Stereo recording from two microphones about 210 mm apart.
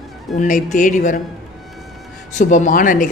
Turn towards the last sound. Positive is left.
turn(degrees=40)  # may be behind; listen again after turning